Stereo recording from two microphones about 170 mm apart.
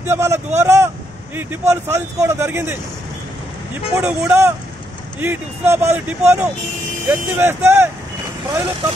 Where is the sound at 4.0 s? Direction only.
15° right (ahead or behind).